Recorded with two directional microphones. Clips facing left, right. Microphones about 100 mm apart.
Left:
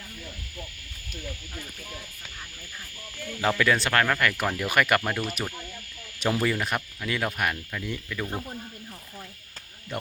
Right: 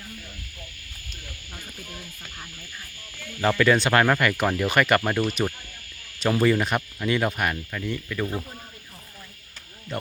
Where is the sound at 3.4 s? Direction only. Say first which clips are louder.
Right 4 dB; centre (ahead or behind).